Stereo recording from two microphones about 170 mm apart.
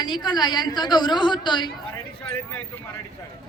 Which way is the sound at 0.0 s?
25° left (ahead or behind).